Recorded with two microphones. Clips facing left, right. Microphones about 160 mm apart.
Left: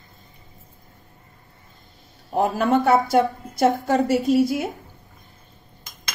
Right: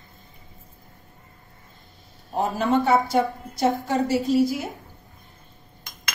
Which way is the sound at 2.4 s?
60° left (ahead or behind).